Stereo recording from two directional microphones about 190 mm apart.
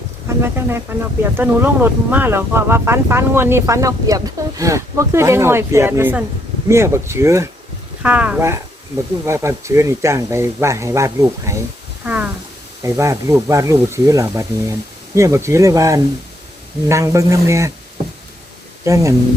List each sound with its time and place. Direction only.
0.3 s speech: 15° right (ahead or behind)
12.0 s a sound: 10° right (ahead or behind)
12.8 s speech: 15° right (ahead or behind)
18.9 s speech: 15° right (ahead or behind)